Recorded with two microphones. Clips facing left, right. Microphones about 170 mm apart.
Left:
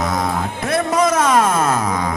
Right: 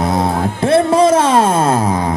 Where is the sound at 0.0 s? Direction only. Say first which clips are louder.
Right 5 dB; 30° right (ahead or behind).